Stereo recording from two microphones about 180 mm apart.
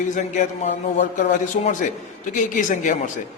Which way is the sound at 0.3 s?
45° left (ahead or behind).